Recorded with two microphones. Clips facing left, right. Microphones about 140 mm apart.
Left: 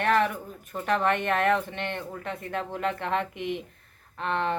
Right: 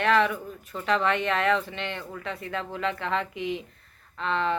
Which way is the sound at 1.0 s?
50° left (ahead or behind).